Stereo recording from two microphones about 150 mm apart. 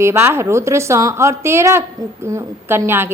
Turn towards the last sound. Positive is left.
turn(degrees=-15)  # may be behind; listen again after turning